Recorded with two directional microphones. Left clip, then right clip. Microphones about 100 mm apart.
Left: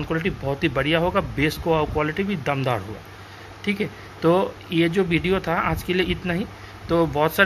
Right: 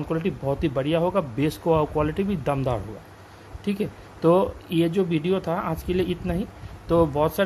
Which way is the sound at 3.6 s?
40° right (ahead or behind).